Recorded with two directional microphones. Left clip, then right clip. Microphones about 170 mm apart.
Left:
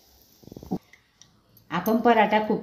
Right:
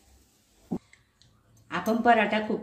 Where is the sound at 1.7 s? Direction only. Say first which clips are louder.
Left 1 dB; 35° left (ahead or behind).